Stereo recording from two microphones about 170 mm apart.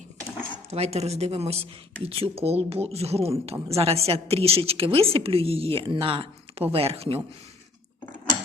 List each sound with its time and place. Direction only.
0.7 s speech: 40° right (ahead or behind)